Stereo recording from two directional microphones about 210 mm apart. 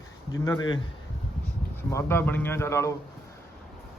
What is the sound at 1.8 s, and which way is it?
A man's voice, 10° left (ahead or behind).